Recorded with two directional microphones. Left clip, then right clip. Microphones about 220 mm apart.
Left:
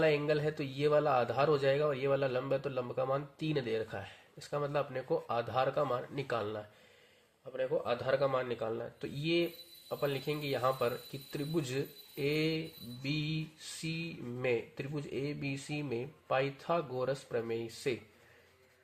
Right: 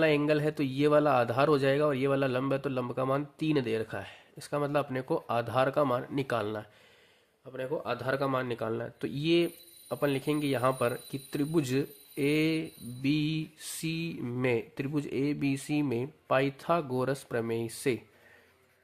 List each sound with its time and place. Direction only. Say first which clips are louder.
0.0 s speech: right 4 dB; 40° right (ahead or behind)